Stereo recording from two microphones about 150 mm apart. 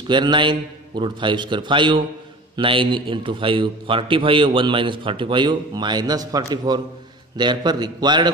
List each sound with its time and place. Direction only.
0.1 s a man's voice: 30° right (ahead or behind)